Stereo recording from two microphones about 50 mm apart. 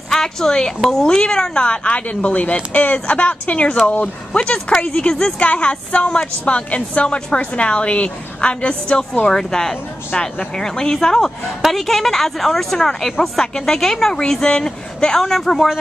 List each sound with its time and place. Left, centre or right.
0.1 s speech: centre
1.0 s a woman's voice: centre
5.4 s a woman's voice: left; by 15.7 s centre